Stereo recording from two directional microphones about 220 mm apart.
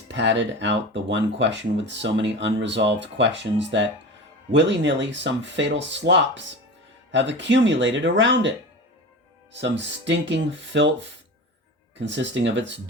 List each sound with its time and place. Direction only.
0.1 s speech: 55° right (ahead or behind)
11.9 s speech: 55° right (ahead or behind)